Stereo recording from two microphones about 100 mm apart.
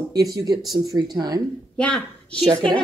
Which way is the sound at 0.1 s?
35° right (ahead or behind).